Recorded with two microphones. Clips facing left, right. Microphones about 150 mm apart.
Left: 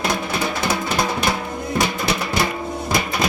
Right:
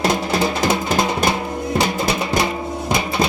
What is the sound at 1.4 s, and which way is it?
Music, 25° right (ahead or behind).